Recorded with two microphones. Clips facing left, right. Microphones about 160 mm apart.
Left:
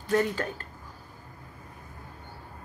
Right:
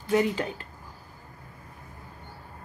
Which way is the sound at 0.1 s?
10° right (ahead or behind).